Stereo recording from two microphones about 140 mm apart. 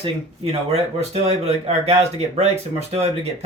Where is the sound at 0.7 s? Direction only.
45° right (ahead or behind).